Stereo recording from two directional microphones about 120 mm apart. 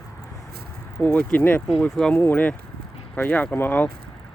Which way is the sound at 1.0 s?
15° left (ahead or behind).